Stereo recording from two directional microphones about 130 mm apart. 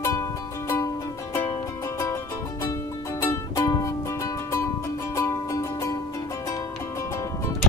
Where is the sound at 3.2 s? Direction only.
25° left (ahead or behind).